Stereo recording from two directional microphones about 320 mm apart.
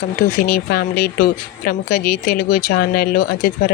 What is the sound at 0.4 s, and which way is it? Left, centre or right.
Speech, left.